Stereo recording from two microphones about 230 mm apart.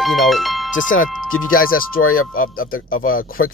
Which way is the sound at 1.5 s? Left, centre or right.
Left.